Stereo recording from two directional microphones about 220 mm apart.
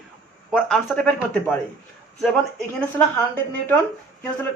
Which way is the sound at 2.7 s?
5° left (ahead or behind).